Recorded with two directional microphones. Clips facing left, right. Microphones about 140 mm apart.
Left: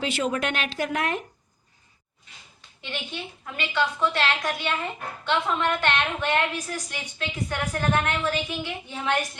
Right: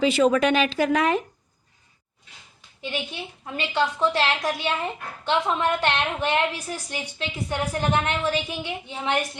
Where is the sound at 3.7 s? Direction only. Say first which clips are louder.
Right 2 dB; 30° right (ahead or behind).